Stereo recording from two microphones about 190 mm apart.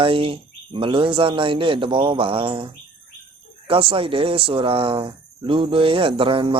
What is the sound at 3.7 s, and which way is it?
Speech, 30° right (ahead or behind).